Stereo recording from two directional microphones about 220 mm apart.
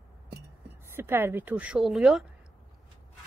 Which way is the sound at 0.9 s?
10° right (ahead or behind).